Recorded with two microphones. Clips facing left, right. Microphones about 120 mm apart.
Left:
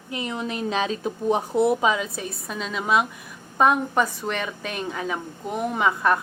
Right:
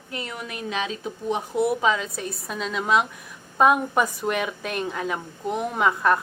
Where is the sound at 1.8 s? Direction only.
10° left (ahead or behind).